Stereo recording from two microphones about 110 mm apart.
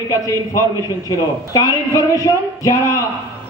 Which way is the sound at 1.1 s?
30° left (ahead or behind).